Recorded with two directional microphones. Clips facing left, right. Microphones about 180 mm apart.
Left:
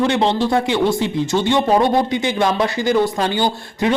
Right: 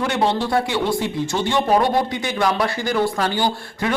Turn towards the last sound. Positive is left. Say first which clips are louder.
# left 3 dB
turn(degrees=20)  # may be behind; listen again after turning